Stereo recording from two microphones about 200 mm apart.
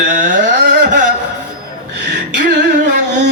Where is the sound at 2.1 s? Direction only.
60° right (ahead or behind).